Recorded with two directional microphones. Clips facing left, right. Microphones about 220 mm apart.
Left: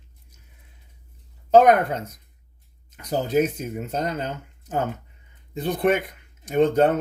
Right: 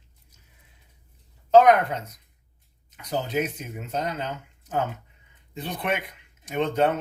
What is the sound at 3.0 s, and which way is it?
Speech, 45° left (ahead or behind).